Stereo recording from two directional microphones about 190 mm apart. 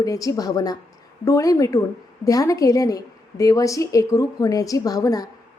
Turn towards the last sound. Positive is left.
turn(degrees=20)  # may be behind; listen again after turning